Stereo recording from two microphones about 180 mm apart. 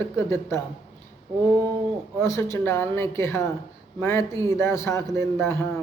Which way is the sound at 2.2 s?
15° left (ahead or behind).